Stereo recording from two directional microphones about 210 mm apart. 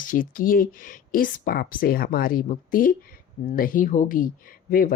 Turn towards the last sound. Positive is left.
turn(degrees=40)  # may be behind; listen again after turning